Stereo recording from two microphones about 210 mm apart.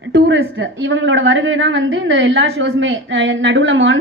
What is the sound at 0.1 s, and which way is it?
A woman's voice, 55° right (ahead or behind).